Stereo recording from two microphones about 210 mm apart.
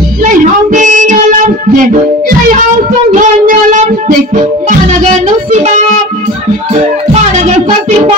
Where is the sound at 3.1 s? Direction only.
35° right (ahead or behind).